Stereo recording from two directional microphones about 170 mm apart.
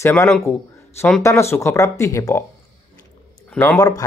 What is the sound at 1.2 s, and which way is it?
Speech, 15° left (ahead or behind).